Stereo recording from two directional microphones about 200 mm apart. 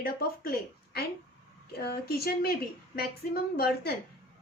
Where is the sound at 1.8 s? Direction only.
50° left (ahead or behind).